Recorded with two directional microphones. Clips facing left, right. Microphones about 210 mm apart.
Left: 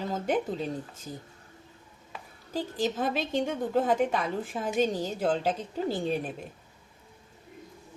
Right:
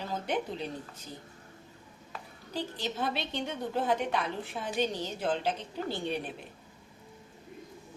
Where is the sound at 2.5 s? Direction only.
45° left (ahead or behind).